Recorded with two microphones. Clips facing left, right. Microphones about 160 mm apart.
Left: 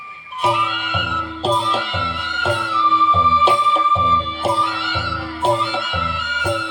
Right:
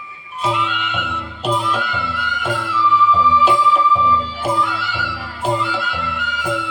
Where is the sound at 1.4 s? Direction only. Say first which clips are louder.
Even; 25° left (ahead or behind).